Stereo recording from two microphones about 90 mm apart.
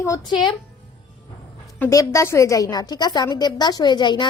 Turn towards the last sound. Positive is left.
turn(degrees=55)  # may be behind; listen again after turning